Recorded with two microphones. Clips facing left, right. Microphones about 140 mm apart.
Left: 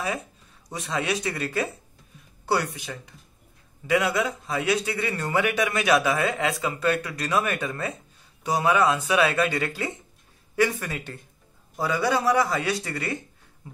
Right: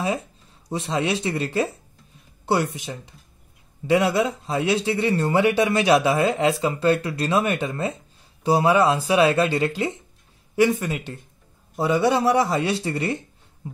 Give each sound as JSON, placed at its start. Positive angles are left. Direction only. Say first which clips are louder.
{"t": 0.7, "sound": "a man's voice", "louder": "right 4 dB", "side_deg": -25}